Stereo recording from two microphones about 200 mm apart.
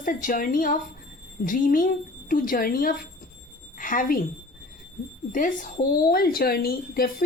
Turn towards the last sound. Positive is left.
turn(degrees=45)  # may be behind; listen again after turning